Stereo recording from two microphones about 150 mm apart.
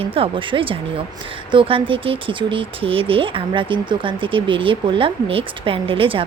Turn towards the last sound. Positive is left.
turn(degrees=-35)  # may be behind; listen again after turning